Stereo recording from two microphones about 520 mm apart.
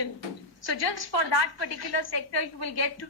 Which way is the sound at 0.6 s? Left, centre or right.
Left.